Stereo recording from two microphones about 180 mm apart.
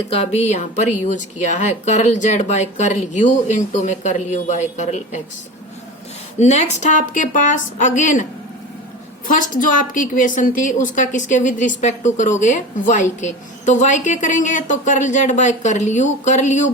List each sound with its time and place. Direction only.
0.1 s speech: 35° left (ahead or behind)
6.4 s a woman's voice: 40° left (ahead or behind)